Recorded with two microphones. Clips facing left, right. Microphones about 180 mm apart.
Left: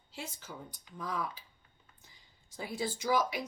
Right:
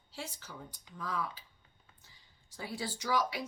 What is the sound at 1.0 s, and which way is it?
Speech, 15° left (ahead or behind).